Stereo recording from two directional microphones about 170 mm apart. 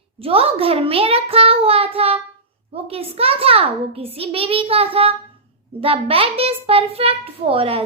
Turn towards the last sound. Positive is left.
turn(degrees=-35)  # may be behind; listen again after turning